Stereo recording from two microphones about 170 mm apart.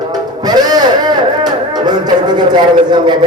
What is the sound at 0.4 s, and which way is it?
Music, 25° right (ahead or behind).